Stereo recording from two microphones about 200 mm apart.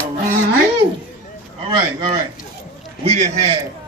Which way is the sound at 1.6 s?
25° right (ahead or behind).